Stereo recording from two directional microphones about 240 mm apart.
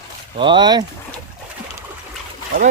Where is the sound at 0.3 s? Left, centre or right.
Centre.